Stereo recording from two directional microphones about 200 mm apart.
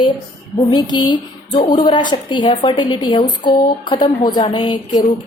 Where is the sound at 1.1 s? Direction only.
25° left (ahead or behind).